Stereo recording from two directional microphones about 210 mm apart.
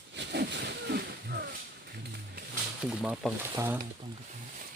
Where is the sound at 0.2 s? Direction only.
55° right (ahead or behind).